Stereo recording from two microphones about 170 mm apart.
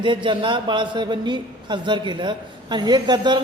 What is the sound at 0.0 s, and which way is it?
A man's voice, 30° right (ahead or behind).